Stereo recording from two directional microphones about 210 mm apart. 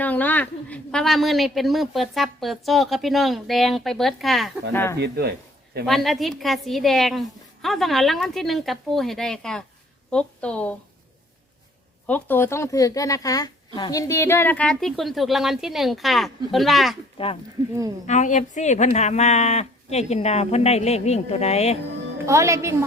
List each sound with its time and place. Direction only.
0.0 s a woman's voice: 10° left (ahead or behind)
4.7 s speech: 10° left (ahead or behind)
4.9 s speech: 50° right (ahead or behind)
5.8 s a woman's voice: centre (ahead or behind)
12.0 s a woman's voice: 10° left (ahead or behind)
17.2 s speech: 25° left (ahead or behind)
18.0 s speech: 35° left (ahead or behind)
22.3 s a woman's voice: 15° right (ahead or behind)